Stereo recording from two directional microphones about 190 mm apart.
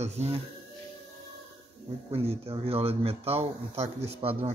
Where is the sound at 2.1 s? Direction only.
30° right (ahead or behind).